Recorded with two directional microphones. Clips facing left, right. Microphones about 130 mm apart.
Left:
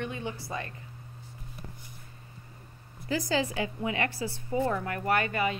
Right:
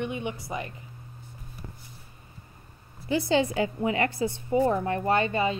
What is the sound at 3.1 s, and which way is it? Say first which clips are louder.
Speech: right 5 dB; 30° right (ahead or behind).